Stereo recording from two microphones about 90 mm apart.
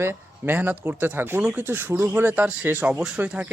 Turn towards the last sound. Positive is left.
turn(degrees=-20)  # may be behind; listen again after turning